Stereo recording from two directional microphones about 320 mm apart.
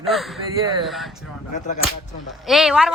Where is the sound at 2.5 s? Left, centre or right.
Centre.